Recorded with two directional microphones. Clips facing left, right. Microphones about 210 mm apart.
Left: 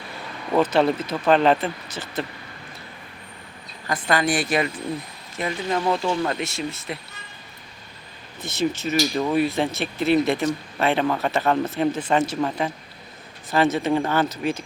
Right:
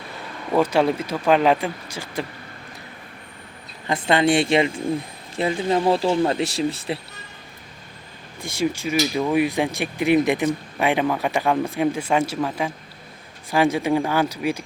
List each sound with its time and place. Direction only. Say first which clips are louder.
0.5 s speech: even; 10° right (ahead or behind)
3.8 s speech: right 4 dB; 25° right (ahead or behind)
8.4 s speech: right 1 dB; 10° right (ahead or behind)